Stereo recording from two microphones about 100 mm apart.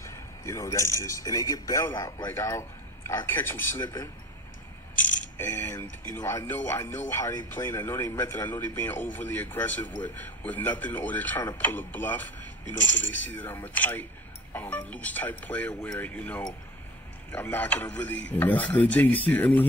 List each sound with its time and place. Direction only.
0.0 s a man's voice: 30° left (ahead or behind)
5.5 s a man's voice: 30° left (ahead or behind)